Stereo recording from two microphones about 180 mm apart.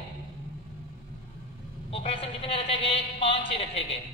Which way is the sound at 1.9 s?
30° left (ahead or behind).